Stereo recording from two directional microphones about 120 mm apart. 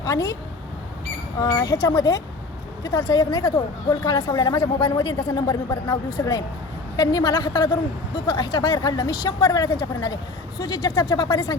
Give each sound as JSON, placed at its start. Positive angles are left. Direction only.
{"t": 0.0, "sound": "a woman's voice", "side_deg": 30}
{"t": 1.4, "sound": "speech", "side_deg": 35}